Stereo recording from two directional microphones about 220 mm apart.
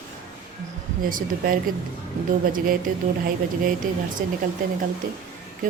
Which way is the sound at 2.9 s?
40° right (ahead or behind).